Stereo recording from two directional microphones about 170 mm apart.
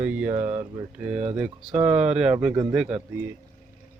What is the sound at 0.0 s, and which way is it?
Speech, 5° right (ahead or behind).